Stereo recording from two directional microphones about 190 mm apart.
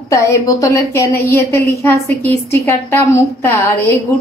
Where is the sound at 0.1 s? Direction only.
15° left (ahead or behind).